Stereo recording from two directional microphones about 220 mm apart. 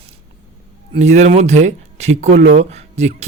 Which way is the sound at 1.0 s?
30° right (ahead or behind).